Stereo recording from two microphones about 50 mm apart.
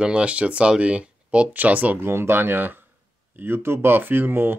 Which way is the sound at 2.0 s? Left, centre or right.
Right.